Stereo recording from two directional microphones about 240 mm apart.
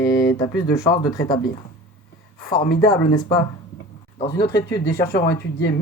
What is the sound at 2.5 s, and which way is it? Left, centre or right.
Speech, left.